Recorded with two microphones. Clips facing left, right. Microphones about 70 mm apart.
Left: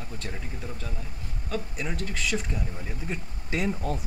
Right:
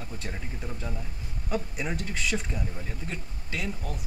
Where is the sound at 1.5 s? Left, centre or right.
Centre.